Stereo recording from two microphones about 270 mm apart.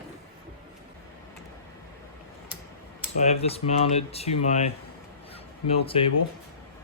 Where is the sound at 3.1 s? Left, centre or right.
Left.